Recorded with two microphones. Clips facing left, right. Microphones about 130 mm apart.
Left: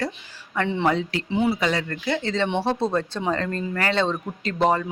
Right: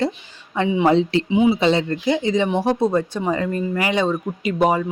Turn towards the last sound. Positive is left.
turn(degrees=-10)  # may be behind; listen again after turning